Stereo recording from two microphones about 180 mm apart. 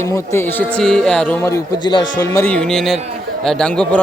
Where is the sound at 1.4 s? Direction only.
15° left (ahead or behind).